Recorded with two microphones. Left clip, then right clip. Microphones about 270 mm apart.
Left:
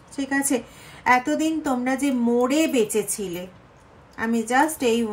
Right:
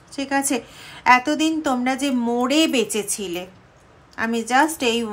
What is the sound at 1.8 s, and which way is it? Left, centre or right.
Speech, centre.